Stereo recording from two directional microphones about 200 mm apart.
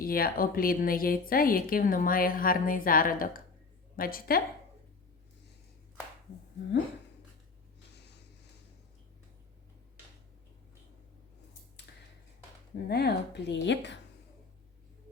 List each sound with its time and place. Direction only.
0.0 s a woman's voice: 45° left (ahead or behind)
12.7 s a woman's voice: 55° left (ahead or behind)